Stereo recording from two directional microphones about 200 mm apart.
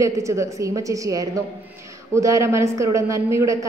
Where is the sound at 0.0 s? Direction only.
15° right (ahead or behind).